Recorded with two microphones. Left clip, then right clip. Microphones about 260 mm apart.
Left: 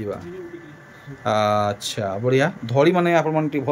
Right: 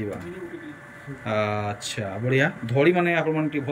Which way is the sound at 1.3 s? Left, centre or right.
Centre.